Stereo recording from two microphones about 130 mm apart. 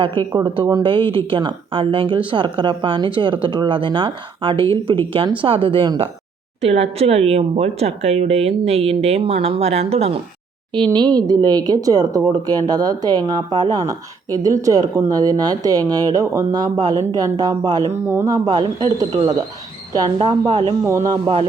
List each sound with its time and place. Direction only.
0.0 s speech: 40° right (ahead or behind)
6.6 s speech: 50° right (ahead or behind)
10.9 s speech: 30° right (ahead or behind)
18.0 s speech: 20° right (ahead or behind)
18.4 s speech: 30° right (ahead or behind)
20.8 s speech: 25° right (ahead or behind)